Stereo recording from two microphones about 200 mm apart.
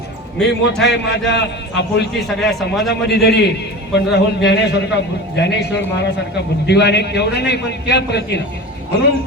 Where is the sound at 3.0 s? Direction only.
55° left (ahead or behind).